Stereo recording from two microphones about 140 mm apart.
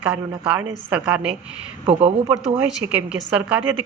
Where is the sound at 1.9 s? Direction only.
45° right (ahead or behind).